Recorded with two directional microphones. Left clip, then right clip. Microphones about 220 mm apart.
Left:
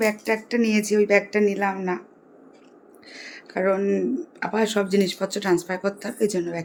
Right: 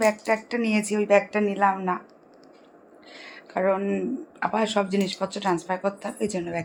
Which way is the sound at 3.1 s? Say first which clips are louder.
Left 3 dB; 15° left (ahead or behind).